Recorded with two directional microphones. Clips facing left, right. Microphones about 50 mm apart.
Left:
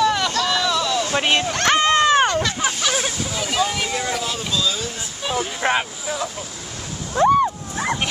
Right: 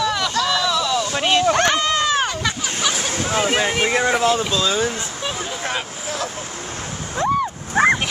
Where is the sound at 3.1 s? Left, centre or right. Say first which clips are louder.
Right 4 dB; right.